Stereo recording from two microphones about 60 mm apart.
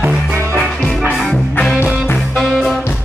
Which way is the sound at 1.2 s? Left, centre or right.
Centre.